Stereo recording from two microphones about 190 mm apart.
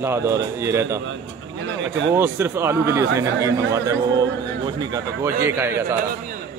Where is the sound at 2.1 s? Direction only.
10° right (ahead or behind).